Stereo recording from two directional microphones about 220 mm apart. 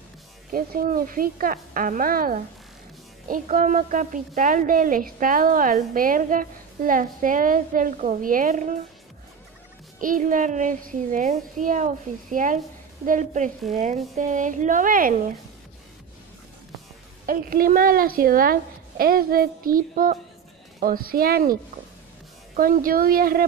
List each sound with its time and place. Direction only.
0.5 s a woman's voice: 40° right (ahead or behind)
9.9 s a woman's voice: 40° right (ahead or behind)
17.3 s a woman's voice: 40° right (ahead or behind)
22.6 s a woman's voice: 40° right (ahead or behind)